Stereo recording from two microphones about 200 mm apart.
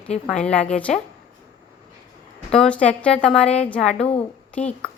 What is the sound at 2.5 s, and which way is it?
A woman's voice, 5° left (ahead or behind).